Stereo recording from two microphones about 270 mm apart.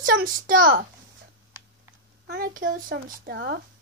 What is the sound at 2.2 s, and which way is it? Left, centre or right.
Speech, right.